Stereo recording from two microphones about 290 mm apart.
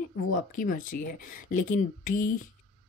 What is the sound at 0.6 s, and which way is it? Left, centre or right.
Speech, left.